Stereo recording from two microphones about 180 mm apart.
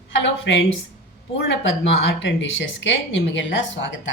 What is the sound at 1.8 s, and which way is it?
Speech, 85° left.